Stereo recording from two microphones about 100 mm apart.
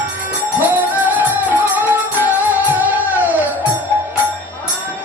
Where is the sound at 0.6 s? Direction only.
15° right (ahead or behind).